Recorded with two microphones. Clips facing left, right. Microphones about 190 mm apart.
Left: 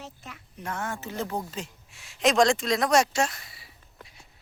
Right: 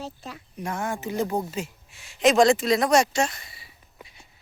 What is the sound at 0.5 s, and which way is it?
Speech, 15° right (ahead or behind).